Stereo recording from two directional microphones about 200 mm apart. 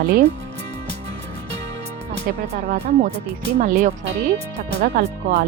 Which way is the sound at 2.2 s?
35° right (ahead or behind).